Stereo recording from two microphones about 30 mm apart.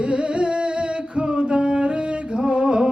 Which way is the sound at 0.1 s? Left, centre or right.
Right.